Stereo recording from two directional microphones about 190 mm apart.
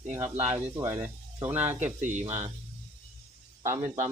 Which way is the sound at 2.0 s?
40° right (ahead or behind).